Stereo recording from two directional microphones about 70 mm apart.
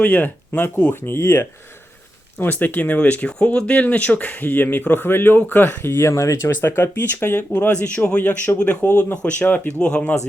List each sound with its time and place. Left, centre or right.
0.0 s speech: left
0.9 s speech: left
2.4 s speech: left
6.5 s speech: left